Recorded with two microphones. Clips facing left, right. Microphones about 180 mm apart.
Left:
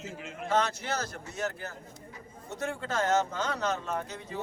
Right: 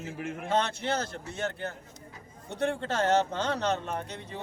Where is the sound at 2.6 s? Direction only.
30° right (ahead or behind).